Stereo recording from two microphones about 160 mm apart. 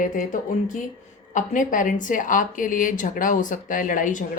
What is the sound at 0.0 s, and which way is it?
A woman's voice, 60° left (ahead or behind).